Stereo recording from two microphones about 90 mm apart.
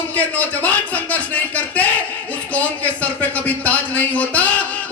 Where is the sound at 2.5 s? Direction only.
15° left (ahead or behind).